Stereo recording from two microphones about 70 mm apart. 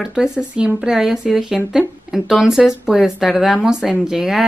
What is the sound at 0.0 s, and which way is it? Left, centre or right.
A woman's voice, centre.